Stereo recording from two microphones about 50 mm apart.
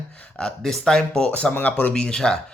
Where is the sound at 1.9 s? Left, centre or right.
Centre.